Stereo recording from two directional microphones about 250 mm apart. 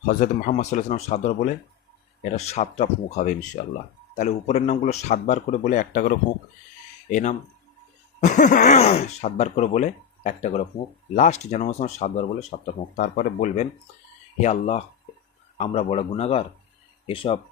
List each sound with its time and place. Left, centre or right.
0.0 s speech: left